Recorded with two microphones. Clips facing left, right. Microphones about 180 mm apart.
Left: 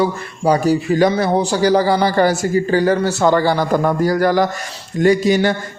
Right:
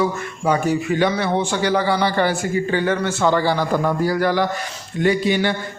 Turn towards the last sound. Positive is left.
turn(degrees=40)  # may be behind; listen again after turning